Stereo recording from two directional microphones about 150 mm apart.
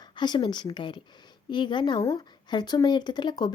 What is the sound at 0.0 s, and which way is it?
A woman's voice, 30° left (ahead or behind).